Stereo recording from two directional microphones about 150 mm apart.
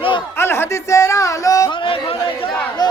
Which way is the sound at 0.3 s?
15° left (ahead or behind).